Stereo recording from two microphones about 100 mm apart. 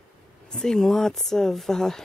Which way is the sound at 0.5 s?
5° left (ahead or behind).